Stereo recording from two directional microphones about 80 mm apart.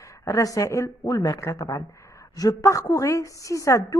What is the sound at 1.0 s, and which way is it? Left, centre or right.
A man's voice, left.